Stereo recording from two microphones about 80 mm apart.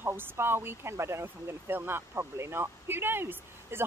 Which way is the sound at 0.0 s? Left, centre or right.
Right.